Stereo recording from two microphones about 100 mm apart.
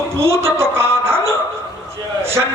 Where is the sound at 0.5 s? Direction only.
25° right (ahead or behind).